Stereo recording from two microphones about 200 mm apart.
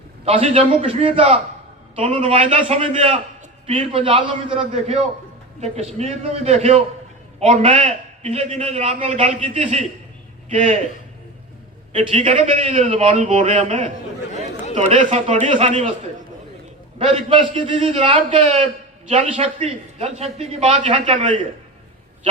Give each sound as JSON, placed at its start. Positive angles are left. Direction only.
{"t": 0.3, "sound": "a man's voice", "side_deg": -30}
{"t": 11.9, "sound": "a man's voice", "side_deg": -25}
{"t": 17.0, "sound": "a man's voice", "side_deg": -30}